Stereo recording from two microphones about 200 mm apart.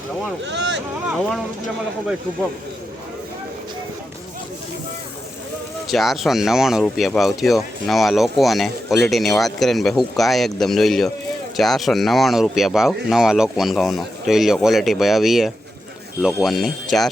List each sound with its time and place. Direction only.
0.4 s speech: 65° right (ahead or behind)
5.9 s speech: centre (ahead or behind)